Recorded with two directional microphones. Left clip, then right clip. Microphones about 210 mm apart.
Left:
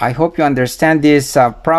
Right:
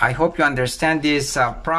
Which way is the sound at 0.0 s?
25° left (ahead or behind).